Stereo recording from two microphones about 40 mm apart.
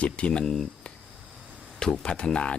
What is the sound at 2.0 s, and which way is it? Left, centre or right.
Speech, left.